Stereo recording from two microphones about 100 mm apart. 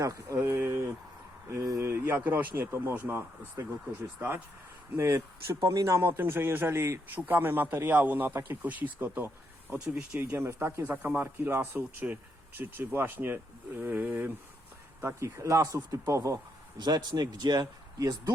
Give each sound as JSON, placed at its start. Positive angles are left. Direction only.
{"t": 0.0, "sound": "speech", "side_deg": -30}
{"t": 4.9, "sound": "speech", "side_deg": -30}
{"t": 10.3, "sound": "speech", "side_deg": -25}
{"t": 16.7, "sound": "speech", "side_deg": -45}